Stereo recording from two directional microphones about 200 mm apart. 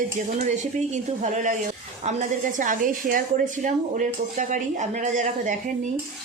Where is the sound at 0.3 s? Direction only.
35° right (ahead or behind).